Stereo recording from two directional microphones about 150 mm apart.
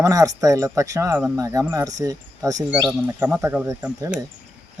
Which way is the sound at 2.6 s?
10° right (ahead or behind).